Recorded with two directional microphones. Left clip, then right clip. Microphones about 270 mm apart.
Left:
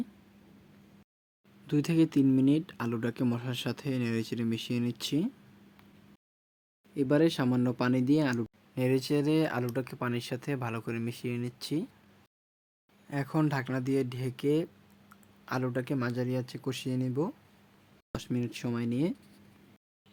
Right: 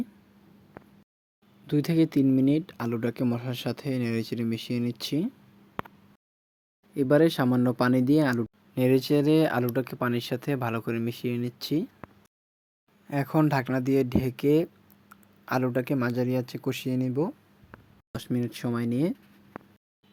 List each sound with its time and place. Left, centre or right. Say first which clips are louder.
1.6 s speech: right 3 dB; centre
6.9 s speech: right 5 dB; centre
13.1 s speech: right 6 dB; centre